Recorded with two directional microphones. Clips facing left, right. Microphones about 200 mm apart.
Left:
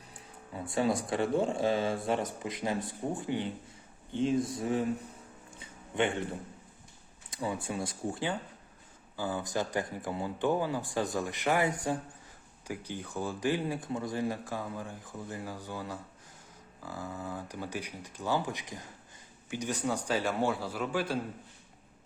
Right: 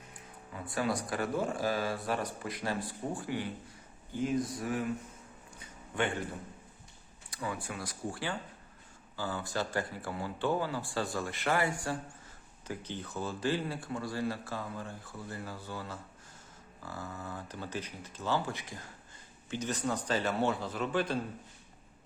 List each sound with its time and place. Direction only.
0.5 s speech: 25° left (ahead or behind)
5.5 s a sound: 20° left (ahead or behind)
7.3 s speech: 20° left (ahead or behind)